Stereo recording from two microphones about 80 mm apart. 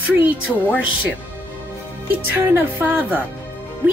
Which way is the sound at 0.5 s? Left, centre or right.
Centre.